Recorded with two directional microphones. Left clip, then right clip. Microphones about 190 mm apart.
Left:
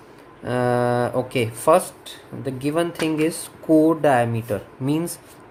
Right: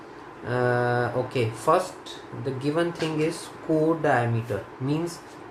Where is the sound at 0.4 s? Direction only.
45° left (ahead or behind).